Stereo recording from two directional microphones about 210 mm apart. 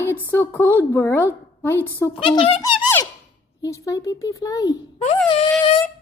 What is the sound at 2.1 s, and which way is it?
A child's voice, 25° left (ahead or behind).